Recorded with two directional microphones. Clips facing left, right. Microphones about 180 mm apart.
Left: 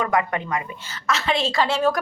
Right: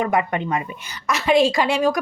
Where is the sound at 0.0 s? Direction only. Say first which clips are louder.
Right 2 dB; 25° right (ahead or behind).